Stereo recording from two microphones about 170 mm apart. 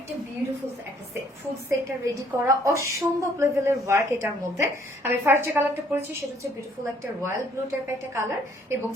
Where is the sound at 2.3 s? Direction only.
15° right (ahead or behind).